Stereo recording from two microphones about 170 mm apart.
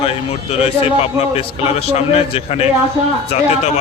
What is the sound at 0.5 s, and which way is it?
A man's voice, 35° left (ahead or behind).